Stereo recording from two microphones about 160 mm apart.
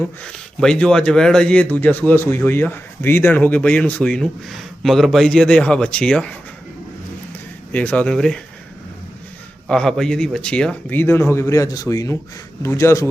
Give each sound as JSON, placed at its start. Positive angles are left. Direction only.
{"t": 0.3, "sound": "a man's voice", "side_deg": 5}
{"t": 7.7, "sound": "a man's voice", "side_deg": 10}
{"t": 9.6, "sound": "a man's voice", "side_deg": 5}